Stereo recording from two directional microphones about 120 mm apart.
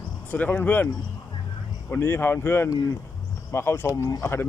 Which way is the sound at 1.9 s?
20° left (ahead or behind).